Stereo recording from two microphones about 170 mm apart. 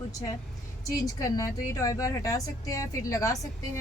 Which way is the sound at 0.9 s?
20° left (ahead or behind).